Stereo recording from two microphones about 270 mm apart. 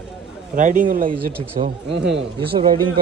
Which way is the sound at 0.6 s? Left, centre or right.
Right.